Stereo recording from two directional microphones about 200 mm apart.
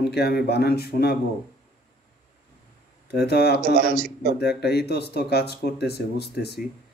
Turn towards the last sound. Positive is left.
turn(degrees=55)  # may be behind; listen again after turning